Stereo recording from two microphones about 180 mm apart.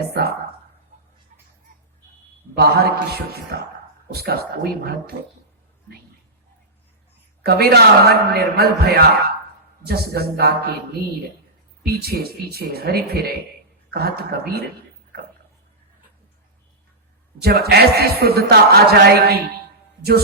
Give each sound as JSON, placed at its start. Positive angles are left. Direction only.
{"t": 0.1, "sound": "speech", "side_deg": -60}
{"t": 2.6, "sound": "speech", "side_deg": -60}
{"t": 7.4, "sound": "speech", "side_deg": -60}
{"t": 12.0, "sound": "speech", "side_deg": -60}
{"t": 17.4, "sound": "speech", "side_deg": -60}